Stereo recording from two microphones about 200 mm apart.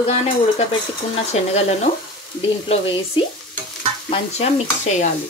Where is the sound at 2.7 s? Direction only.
25° left (ahead or behind).